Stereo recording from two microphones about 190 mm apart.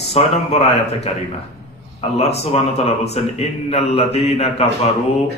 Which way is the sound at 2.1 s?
35° left (ahead or behind).